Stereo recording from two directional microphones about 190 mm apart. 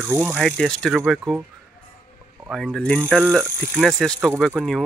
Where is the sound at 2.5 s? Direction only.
Centre (ahead or behind).